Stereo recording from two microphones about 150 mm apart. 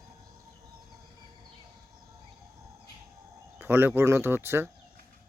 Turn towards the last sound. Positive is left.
turn(degrees=-15)  # may be behind; listen again after turning